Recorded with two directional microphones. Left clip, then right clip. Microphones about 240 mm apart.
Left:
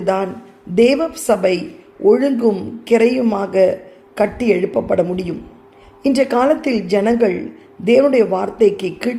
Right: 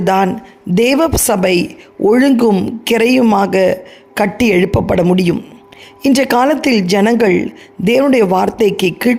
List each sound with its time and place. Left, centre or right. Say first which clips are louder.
0.0 s speech: right 5 dB; right